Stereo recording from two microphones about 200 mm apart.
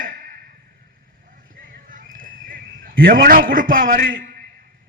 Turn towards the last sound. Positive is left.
turn(degrees=-45)  # may be behind; listen again after turning